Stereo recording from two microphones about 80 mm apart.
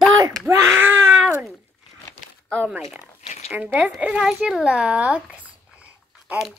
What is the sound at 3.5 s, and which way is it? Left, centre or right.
A child's voice, right.